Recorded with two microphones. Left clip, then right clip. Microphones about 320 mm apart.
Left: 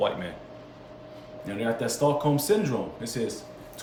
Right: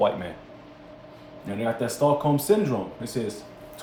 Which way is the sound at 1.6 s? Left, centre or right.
Centre.